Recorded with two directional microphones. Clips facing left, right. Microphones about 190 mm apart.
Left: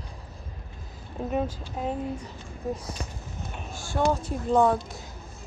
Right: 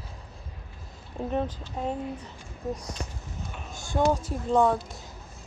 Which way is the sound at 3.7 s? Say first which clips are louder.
Right 1 dB; 20° right (ahead or behind).